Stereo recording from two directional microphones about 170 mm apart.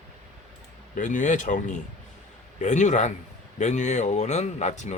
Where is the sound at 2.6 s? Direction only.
45° left (ahead or behind).